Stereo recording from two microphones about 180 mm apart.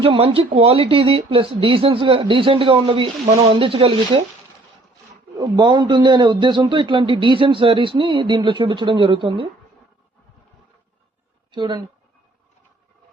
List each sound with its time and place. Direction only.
0.0 s speech: 30° right (ahead or behind)
5.4 s a man's voice: 25° right (ahead or behind)
11.5 s a man's voice: 25° right (ahead or behind)